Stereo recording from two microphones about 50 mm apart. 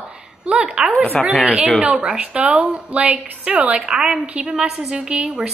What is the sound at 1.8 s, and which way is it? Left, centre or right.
A woman's voice, right.